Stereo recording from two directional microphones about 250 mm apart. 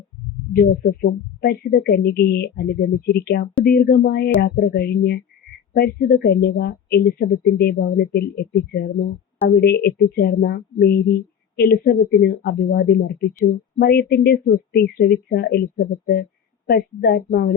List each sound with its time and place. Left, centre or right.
0.5 s a woman's voice: left